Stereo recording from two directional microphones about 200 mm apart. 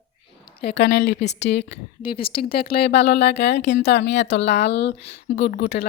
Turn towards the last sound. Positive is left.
turn(degrees=55)  # may be behind; listen again after turning